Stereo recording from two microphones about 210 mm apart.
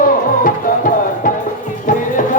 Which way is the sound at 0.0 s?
40° left (ahead or behind).